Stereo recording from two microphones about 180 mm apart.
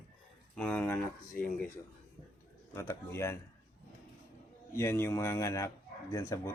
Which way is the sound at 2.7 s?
15° left (ahead or behind).